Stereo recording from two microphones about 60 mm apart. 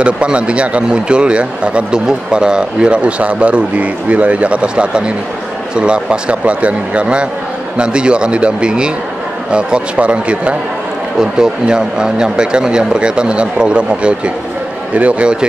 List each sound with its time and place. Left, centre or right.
0.0 s a man's voice: centre